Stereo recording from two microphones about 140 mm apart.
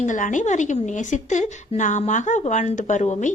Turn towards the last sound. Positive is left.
turn(degrees=60)  # may be behind; listen again after turning